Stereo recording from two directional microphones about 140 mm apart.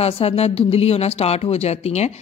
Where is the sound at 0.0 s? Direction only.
45° left (ahead or behind).